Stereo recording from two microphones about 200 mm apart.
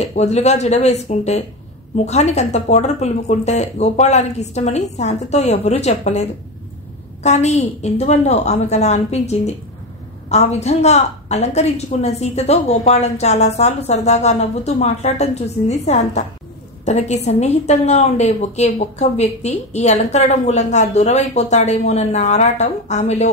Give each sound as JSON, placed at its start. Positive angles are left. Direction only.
{"t": 0.0, "sound": "a woman's voice", "side_deg": 35}
{"t": 7.2, "sound": "a woman's voice", "side_deg": 35}